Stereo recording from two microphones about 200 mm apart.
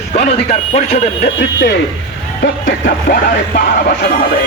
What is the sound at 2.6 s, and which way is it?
Music, 45° left (ahead or behind).